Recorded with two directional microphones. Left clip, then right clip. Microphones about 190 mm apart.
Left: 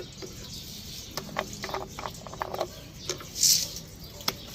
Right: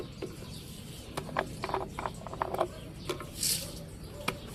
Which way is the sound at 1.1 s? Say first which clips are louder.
Even; 20° right (ahead or behind).